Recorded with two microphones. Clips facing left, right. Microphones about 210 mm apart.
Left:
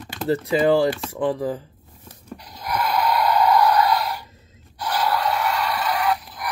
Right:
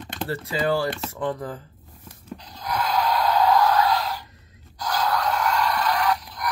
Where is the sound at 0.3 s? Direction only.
20° left (ahead or behind).